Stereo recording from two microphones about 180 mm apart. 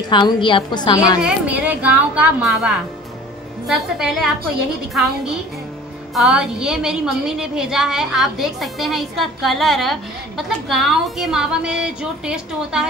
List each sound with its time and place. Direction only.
0.1 s a woman's voice: 25° left (ahead or behind)
1.2 s a woman's voice: 10° right (ahead or behind)
6.1 s a woman's voice: 5° right (ahead or behind)